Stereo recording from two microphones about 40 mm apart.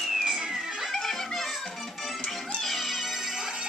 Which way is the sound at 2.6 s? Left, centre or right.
Centre.